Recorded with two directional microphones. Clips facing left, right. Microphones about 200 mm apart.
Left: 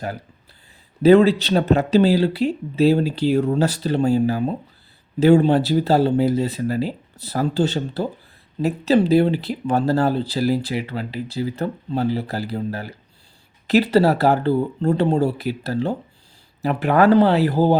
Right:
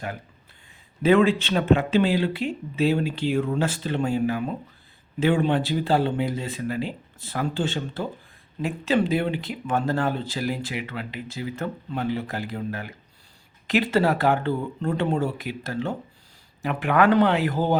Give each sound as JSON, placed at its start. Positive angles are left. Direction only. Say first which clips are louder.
{"t": 1.0, "sound": "speech", "louder": "left 6 dB", "side_deg": 35}